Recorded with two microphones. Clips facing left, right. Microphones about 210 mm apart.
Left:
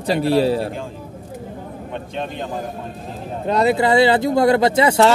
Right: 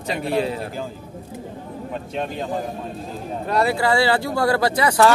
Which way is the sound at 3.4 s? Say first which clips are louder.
Left 4 dB; 20° left (ahead or behind).